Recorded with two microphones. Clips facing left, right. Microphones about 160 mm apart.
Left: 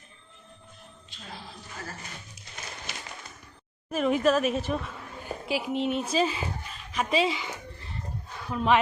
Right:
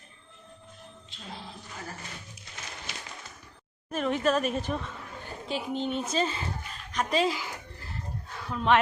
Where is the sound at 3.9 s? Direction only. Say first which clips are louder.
Left 3 dB; 5° left (ahead or behind).